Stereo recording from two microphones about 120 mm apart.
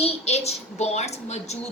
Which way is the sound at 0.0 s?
60° left (ahead or behind).